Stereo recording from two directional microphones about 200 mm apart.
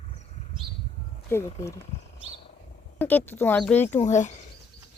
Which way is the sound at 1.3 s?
10° left (ahead or behind).